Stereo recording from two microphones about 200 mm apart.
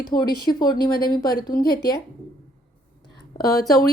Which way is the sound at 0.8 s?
45° left (ahead or behind).